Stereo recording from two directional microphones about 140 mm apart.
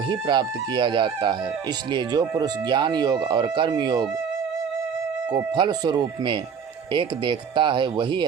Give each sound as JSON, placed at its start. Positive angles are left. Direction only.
{"t": 0.3, "sound": "speech", "side_deg": -35}
{"t": 5.3, "sound": "speech", "side_deg": -35}